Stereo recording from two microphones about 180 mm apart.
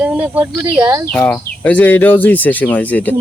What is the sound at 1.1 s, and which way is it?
Speech, 10° left (ahead or behind).